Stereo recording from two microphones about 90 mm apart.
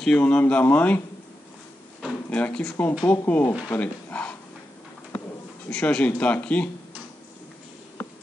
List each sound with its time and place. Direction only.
0.0 s speech: 10° left (ahead or behind)
2.2 s speech: 15° left (ahead or behind)
3.7 s a sound: 15° left (ahead or behind)
5.7 s speech: 10° left (ahead or behind)